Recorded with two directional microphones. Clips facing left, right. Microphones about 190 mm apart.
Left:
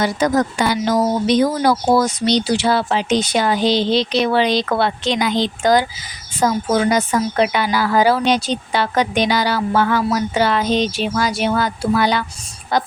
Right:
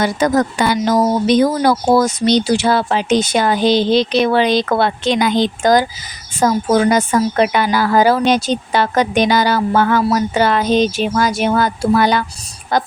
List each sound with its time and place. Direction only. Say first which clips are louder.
0.0 s speech: right 2 dB; 55° right (ahead or behind)